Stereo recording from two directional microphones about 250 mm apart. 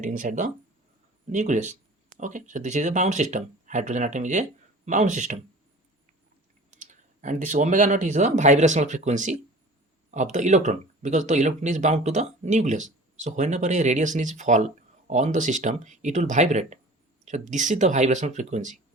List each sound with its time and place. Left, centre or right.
0.0 s speech: right
6.7 s speech: right